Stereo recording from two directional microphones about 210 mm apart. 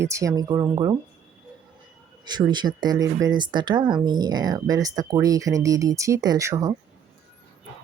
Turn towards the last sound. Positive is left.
turn(degrees=-15)  # may be behind; listen again after turning